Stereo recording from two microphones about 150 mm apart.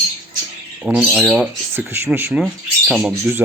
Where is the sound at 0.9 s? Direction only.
Centre (ahead or behind).